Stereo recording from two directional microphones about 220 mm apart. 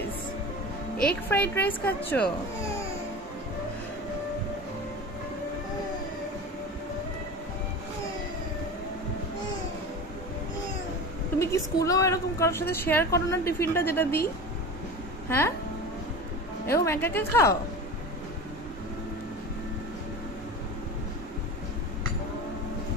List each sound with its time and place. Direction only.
1.3 s speech: 5° left (ahead or behind)
11.3 s a woman's voice: 15° left (ahead or behind)
15.2 s speech: 10° left (ahead or behind)
16.6 s speech: 10° left (ahead or behind)